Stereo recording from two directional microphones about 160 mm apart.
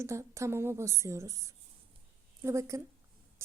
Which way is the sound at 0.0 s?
20° right (ahead or behind).